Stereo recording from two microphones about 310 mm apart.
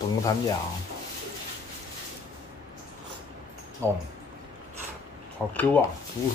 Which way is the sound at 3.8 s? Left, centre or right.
Centre.